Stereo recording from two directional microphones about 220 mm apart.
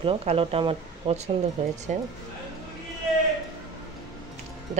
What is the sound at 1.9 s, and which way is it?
Music, 30° right (ahead or behind).